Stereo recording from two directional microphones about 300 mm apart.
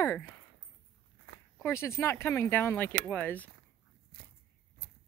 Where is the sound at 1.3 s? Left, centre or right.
Right.